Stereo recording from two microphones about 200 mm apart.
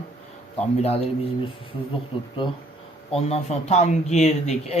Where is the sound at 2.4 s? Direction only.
25° left (ahead or behind).